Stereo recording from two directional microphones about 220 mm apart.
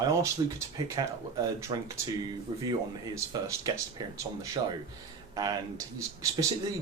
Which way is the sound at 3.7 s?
15° right (ahead or behind).